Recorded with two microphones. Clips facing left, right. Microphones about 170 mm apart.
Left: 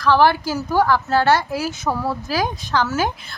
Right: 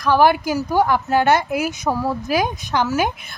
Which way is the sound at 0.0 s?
15° right (ahead or behind).